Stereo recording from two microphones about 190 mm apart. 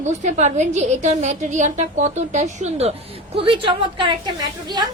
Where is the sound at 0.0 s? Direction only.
40° right (ahead or behind).